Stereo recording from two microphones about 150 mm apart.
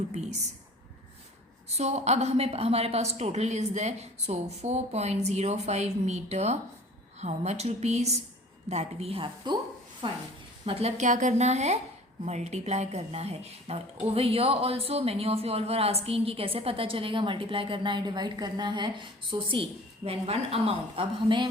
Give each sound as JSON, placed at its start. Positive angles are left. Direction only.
{"t": 1.7, "sound": "a woman's voice", "side_deg": -45}